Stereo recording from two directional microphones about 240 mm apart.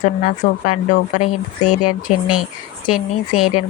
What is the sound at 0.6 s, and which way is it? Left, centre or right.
Speech, left.